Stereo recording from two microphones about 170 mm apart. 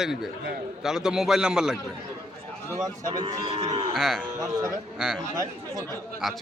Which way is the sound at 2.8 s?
20° right (ahead or behind).